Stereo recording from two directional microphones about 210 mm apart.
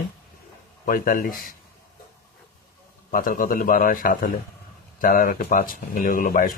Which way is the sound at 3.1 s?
40° left (ahead or behind).